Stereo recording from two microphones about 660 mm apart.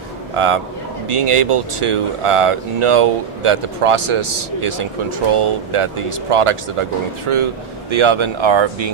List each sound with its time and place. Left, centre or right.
0.3 s speech: right